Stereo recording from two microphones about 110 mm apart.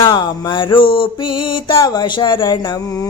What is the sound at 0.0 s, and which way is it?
Speech, 40° left (ahead or behind).